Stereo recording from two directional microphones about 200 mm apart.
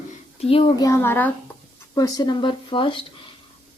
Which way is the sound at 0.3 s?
30° left (ahead or behind).